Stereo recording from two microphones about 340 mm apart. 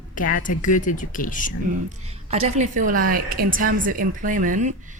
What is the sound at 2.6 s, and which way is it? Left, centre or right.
A woman's voice, right.